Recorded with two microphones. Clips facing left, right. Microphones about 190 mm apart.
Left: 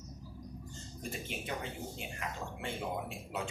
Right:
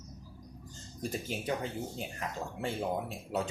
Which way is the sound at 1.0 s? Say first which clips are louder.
Right 5 dB; 35° right (ahead or behind).